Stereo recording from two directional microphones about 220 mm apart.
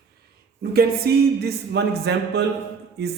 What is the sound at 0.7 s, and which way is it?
Speech, 45° right (ahead or behind).